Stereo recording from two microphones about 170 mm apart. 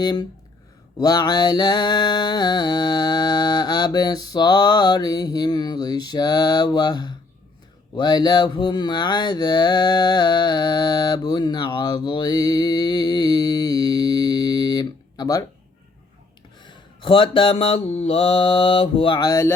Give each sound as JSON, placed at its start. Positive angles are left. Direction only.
{"t": 0.0, "sound": "mantra", "side_deg": 25}
{"t": 16.6, "sound": "mantra", "side_deg": 30}